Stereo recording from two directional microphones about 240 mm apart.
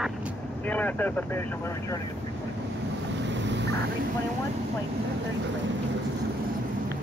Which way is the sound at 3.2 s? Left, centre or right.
Right.